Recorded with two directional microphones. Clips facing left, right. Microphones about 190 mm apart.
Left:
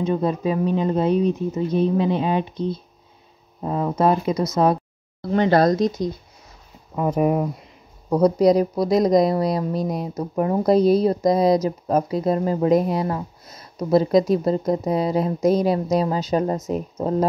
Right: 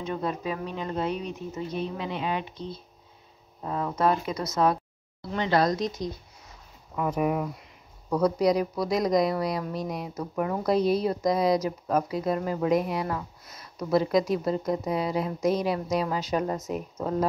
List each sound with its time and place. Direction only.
0.0 s a woman's voice: 35° left (ahead or behind)
3.6 s speech: 25° left (ahead or behind)
5.3 s speech: 45° left (ahead or behind)
7.0 s a woman's voice: 35° left (ahead or behind)